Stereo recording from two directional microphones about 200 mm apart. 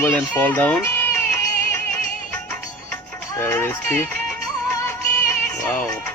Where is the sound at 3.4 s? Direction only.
10° left (ahead or behind).